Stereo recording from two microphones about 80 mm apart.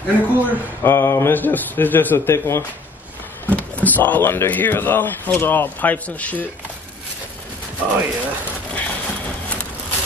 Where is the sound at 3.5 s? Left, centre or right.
Centre.